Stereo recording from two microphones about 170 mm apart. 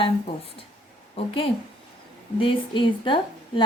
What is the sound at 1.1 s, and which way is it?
A woman's voice, 30° left (ahead or behind).